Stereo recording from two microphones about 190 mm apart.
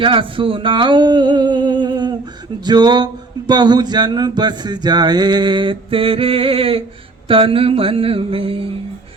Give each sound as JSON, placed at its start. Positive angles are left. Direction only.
{"t": 0.0, "sound": "speech", "side_deg": -25}